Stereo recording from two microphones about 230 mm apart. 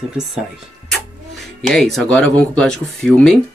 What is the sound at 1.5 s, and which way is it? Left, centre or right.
Speech, centre.